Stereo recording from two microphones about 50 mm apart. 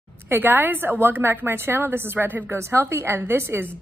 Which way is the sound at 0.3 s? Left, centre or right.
Right.